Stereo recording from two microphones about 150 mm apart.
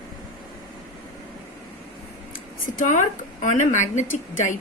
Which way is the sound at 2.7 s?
55° left (ahead or behind).